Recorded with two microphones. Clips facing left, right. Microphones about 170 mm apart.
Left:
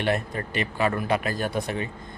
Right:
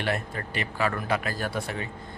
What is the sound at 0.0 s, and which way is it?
A man's voice, 20° left (ahead or behind).